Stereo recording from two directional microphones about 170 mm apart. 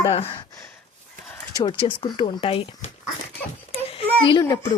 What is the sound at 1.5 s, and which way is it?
Speech, 30° left (ahead or behind).